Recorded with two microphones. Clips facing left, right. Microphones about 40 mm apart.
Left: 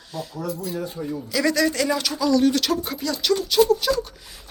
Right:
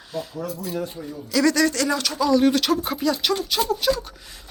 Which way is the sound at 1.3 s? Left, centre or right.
Centre.